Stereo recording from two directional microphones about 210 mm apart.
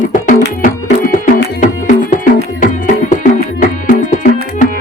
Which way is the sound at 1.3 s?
40° left (ahead or behind).